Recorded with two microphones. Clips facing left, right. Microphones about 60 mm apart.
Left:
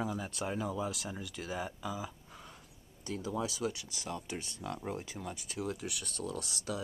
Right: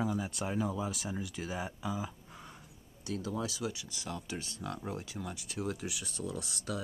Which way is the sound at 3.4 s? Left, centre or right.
Left.